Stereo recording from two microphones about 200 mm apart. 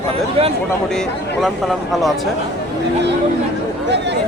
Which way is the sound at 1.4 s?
Centre (ahead or behind).